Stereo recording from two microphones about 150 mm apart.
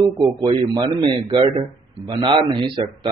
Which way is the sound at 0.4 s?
30° right (ahead or behind).